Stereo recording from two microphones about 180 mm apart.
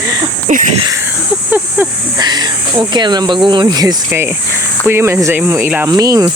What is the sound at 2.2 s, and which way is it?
Speech, 25° right (ahead or behind).